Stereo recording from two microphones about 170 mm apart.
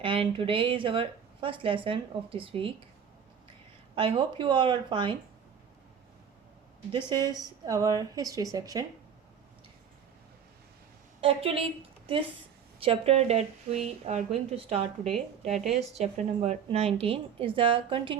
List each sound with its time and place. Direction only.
0.0 s a woman's voice: 30° right (ahead or behind)
3.9 s a woman's voice: 30° right (ahead or behind)
7.1 s a woman's voice: 25° right (ahead or behind)
11.2 s a woman's voice: 35° right (ahead or behind)
15.1 s speech: centre (ahead or behind)
15.7 s a woman's voice: 40° right (ahead or behind)